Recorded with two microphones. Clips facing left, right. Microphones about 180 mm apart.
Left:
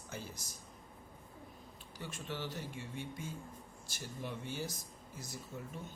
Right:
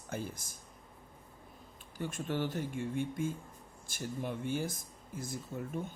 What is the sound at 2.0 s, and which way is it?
Speech, 50° right (ahead or behind).